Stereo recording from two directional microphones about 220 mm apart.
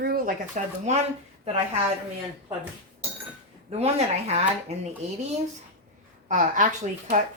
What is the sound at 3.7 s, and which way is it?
Speech, 30° right (ahead or behind).